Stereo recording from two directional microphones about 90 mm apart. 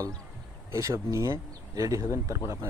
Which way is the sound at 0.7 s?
35° right (ahead or behind).